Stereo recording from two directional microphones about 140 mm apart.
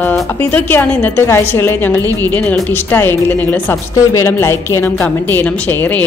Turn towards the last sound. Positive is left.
turn(degrees=10)  # may be behind; listen again after turning